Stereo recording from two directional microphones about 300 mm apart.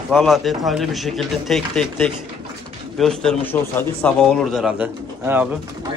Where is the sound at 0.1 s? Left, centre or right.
Centre.